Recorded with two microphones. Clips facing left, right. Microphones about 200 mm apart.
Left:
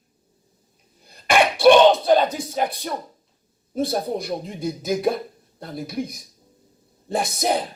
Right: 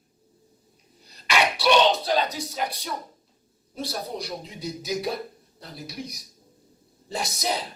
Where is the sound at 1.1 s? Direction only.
50° left (ahead or behind).